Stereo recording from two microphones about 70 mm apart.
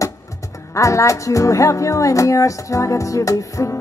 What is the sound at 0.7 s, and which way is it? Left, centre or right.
Speech, left.